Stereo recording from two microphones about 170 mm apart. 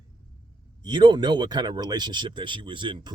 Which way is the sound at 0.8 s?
25° right (ahead or behind).